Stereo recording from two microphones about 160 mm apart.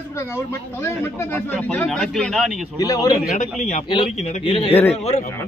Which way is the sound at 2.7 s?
20° left (ahead or behind).